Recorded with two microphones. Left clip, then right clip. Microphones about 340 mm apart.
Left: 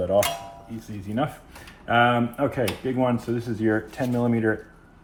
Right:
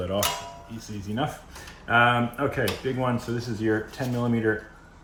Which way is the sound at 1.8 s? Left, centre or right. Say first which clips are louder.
Left 1 dB; centre.